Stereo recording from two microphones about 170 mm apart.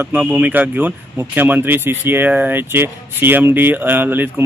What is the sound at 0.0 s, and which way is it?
Speech, 10° right (ahead or behind).